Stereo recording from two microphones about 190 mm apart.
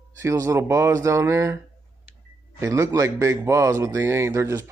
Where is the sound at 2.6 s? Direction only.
15° right (ahead or behind).